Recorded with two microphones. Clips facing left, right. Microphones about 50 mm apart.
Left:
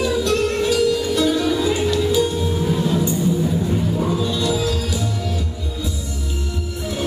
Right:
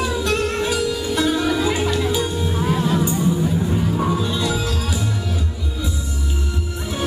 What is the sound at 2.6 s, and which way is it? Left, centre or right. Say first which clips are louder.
Music: right 2 dB; right.